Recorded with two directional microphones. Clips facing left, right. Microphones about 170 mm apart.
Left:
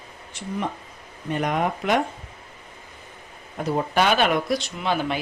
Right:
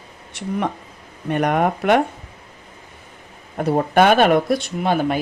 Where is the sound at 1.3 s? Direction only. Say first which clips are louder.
Right 5 dB; 60° right (ahead or behind).